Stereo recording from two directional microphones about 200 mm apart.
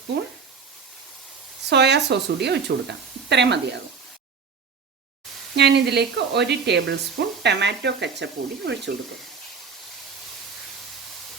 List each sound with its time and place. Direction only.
1.7 s speech: 60° right (ahead or behind)
5.5 s speech: 55° right (ahead or behind)